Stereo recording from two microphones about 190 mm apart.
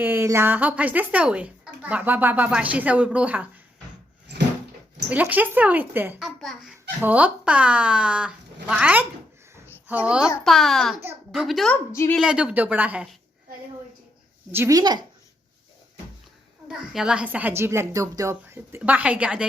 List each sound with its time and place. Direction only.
0.0 s a child's voice: 10° right (ahead or behind)
5.0 s a child's voice: 10° right (ahead or behind)
11.9 s a woman's voice: 15° left (ahead or behind)
12.1 s speech: 5° right (ahead or behind)
14.5 s speech: 15° right (ahead or behind)
16.6 s a child's voice: 5° right (ahead or behind)